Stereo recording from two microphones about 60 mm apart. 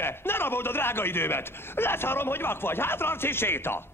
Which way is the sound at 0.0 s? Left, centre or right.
Left.